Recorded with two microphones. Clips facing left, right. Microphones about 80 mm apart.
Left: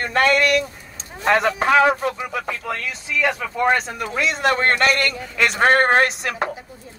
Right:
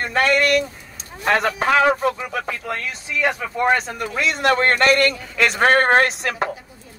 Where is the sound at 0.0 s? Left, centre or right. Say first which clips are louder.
Left 1 dB; centre.